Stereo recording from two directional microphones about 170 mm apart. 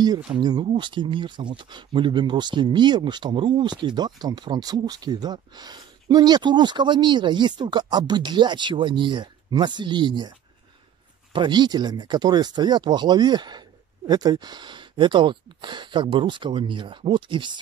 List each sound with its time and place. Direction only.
0.4 s speech: 25° right (ahead or behind)
11.3 s speech: 25° right (ahead or behind)